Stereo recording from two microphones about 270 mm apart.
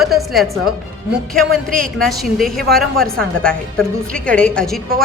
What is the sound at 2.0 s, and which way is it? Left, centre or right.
A woman's voice, centre.